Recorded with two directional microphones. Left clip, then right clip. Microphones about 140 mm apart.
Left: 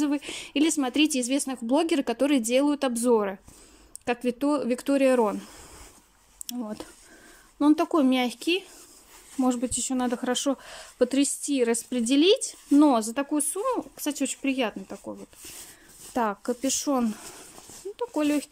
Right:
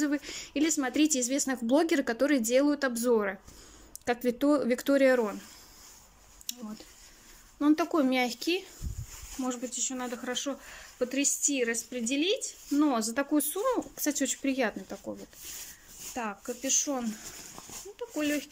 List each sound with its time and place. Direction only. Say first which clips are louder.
0.0 s speech: left 3 dB; 20° left (ahead or behind)
6.4 s speech: left 6 dB; 55° left (ahead or behind)
7.5 s speech: left 4 dB; 25° left (ahead or behind)
9.4 s speech: left 7 dB; 35° left (ahead or behind)
12.7 s speech: left 7 dB; 25° left (ahead or behind)
16.2 s speech: left 9 dB; 40° left (ahead or behind)